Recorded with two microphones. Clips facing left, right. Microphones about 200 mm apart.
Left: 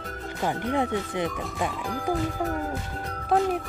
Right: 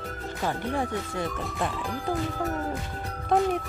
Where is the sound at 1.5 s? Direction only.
10° left (ahead or behind).